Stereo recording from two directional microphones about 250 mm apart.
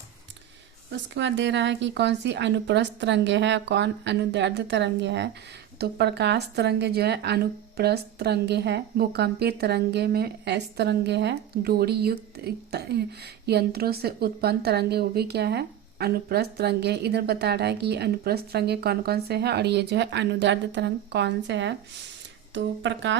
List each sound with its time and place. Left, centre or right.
0.9 s a woman's voice: right